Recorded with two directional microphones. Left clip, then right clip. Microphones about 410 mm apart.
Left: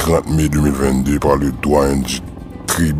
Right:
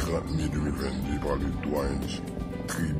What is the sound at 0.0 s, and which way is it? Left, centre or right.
Speech, left.